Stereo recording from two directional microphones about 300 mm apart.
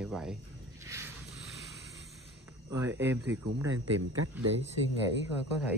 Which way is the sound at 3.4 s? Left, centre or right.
Right.